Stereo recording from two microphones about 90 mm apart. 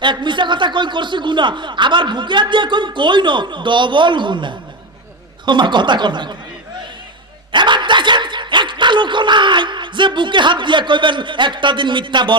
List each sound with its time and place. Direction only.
0.0 s speech: 60° right (ahead or behind)
7.5 s dog: 60° right (ahead or behind)